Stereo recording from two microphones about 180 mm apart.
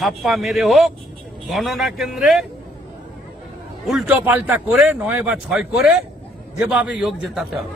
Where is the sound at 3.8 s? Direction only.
5° right (ahead or behind).